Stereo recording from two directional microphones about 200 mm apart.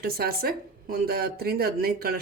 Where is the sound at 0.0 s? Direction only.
50° right (ahead or behind).